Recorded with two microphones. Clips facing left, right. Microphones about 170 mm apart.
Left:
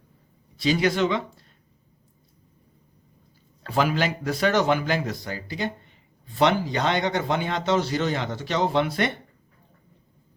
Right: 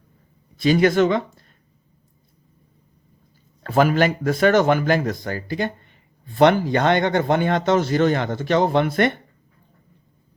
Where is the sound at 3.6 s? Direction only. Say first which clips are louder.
Right 6 dB; 50° right (ahead or behind).